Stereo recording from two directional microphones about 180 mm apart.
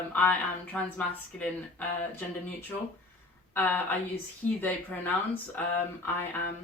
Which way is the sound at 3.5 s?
10° left (ahead or behind).